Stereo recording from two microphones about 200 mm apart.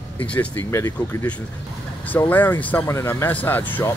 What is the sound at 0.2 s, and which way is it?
Speech, 5° left (ahead or behind).